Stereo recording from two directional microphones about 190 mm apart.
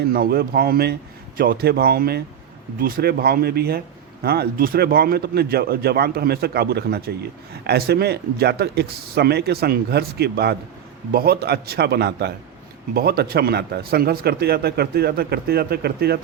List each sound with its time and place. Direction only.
0.0 s speech: 55° right (ahead or behind)